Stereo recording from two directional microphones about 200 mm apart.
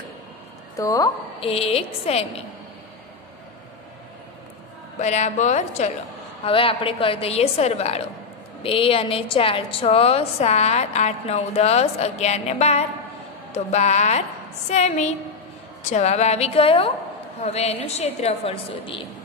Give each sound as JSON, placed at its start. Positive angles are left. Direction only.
{"t": 0.7, "sound": "a woman's voice", "side_deg": 15}
{"t": 1.4, "sound": "a woman's voice", "side_deg": 30}
{"t": 4.9, "sound": "a woman's voice", "side_deg": 35}